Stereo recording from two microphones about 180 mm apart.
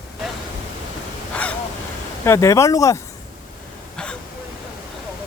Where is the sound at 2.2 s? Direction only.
15° left (ahead or behind).